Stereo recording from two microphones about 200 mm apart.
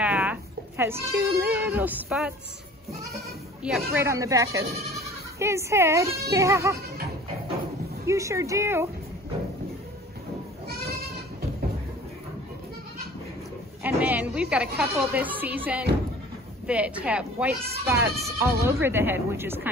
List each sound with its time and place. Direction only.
0.0 s speech: 5° right (ahead or behind)
3.9 s a woman's voice: 15° right (ahead or behind)
8.1 s a woman's voice: 15° right (ahead or behind)
13.8 s a woman's voice: 10° right (ahead or behind)